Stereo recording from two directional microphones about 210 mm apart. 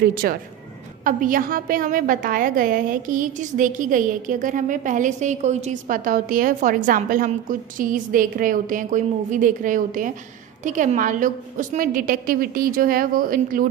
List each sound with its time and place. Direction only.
0.0 s a woman's voice: 45° right (ahead or behind)